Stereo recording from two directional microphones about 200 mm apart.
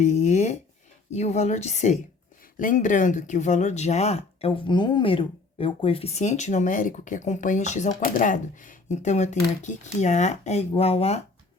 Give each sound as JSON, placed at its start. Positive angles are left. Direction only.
{"t": 0.0, "sound": "speech", "side_deg": 35}